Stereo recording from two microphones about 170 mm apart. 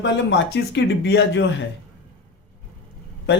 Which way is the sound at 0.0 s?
90° left.